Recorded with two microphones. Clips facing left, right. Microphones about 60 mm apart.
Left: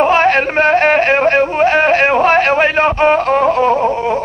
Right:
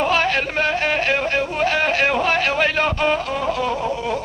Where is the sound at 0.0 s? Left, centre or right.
Left.